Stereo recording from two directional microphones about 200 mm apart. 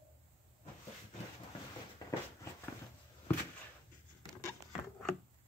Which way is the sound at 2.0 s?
20° left (ahead or behind).